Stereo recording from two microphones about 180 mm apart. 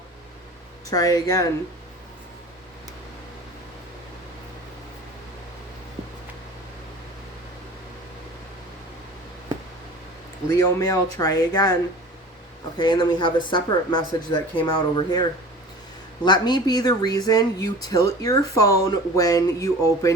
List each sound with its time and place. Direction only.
0.9 s speech: 20° left (ahead or behind)
10.5 s speech: 20° left (ahead or behind)
12.8 s speech: 25° left (ahead or behind)